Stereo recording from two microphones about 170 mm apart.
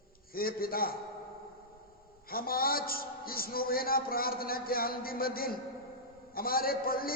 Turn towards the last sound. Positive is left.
turn(degrees=60)  # may be behind; listen again after turning